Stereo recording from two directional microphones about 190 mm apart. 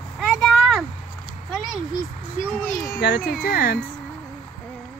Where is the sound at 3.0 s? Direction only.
50° left (ahead or behind).